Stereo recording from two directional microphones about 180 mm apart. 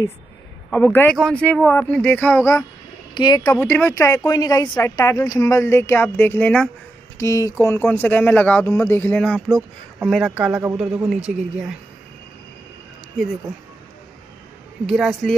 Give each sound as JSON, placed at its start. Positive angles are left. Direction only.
{"t": 0.7, "sound": "speech", "side_deg": 5}
{"t": 9.6, "sound": "speech", "side_deg": -10}
{"t": 14.9, "sound": "speech", "side_deg": 0}